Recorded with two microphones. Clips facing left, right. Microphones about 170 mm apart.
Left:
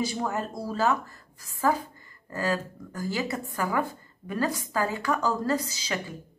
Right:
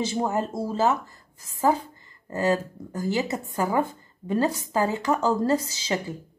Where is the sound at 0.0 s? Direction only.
25° right (ahead or behind).